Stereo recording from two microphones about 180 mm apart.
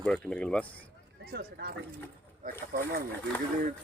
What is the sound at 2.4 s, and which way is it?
Speech, 50° right (ahead or behind).